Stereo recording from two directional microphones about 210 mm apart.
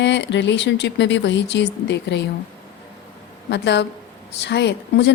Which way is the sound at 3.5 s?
55° left (ahead or behind).